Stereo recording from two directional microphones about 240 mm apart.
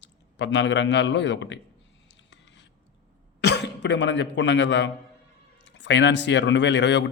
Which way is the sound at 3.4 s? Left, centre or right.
Left.